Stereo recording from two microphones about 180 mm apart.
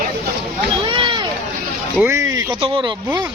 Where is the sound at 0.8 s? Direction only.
25° right (ahead or behind).